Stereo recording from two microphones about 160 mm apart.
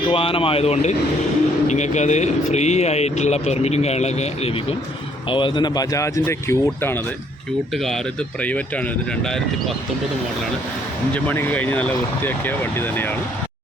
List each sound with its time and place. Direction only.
0.1 s a man's voice: 35° left (ahead or behind)
5.3 s speech: 30° left (ahead or behind)
8.4 s speech: 10° left (ahead or behind)
11.1 s speech: 10° left (ahead or behind)